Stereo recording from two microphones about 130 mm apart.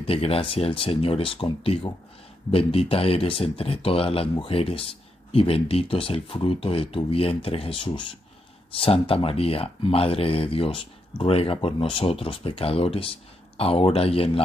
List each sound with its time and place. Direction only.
0.0 s speech: 45° left (ahead or behind)